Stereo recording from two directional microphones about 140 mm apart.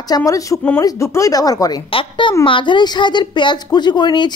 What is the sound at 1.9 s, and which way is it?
A woman's voice, 40° left (ahead or behind).